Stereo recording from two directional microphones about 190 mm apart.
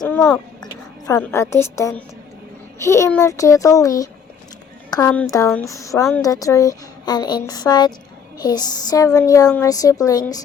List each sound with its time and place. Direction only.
0.0 s a child's voice: 10° left (ahead or behind)